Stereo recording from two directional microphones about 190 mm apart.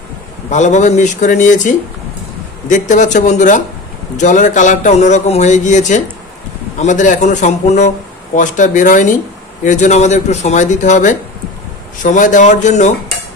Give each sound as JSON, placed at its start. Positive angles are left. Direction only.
{"t": 0.5, "sound": "speech", "side_deg": 40}